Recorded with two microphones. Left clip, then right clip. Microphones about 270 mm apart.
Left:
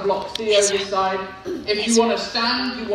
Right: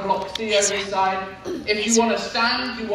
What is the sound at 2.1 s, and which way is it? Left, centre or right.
Speech, right.